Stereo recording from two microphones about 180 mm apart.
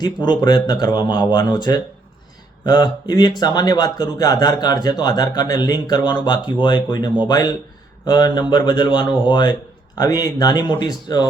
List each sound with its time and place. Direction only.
0.0 s speech: 25° left (ahead or behind)